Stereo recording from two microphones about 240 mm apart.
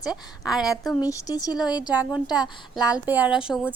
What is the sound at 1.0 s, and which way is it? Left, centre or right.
Speech, centre.